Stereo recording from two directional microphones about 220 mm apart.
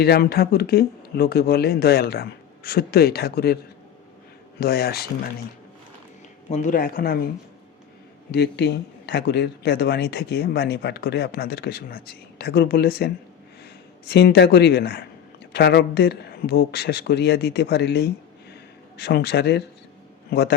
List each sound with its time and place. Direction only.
0.0 s speech: 45° left (ahead or behind)
4.6 s speech: 45° left (ahead or behind)
6.5 s a man's voice: 35° left (ahead or behind)
8.3 s speech: 50° left (ahead or behind)